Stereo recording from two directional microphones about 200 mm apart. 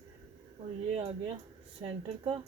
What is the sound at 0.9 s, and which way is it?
Speech, 30° right (ahead or behind).